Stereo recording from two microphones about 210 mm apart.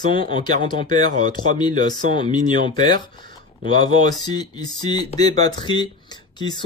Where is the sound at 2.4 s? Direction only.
40° right (ahead or behind).